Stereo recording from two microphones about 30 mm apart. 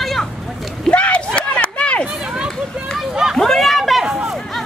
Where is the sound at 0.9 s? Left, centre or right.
Left.